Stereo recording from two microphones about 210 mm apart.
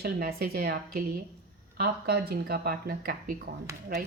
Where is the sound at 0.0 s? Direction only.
45° right (ahead or behind).